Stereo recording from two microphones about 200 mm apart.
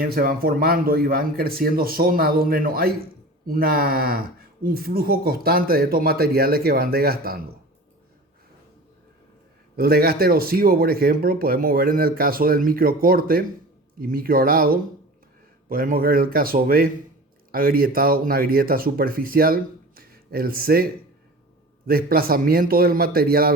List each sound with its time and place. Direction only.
0.0 s speech: 50° right (ahead or behind)
9.7 s speech: 50° right (ahead or behind)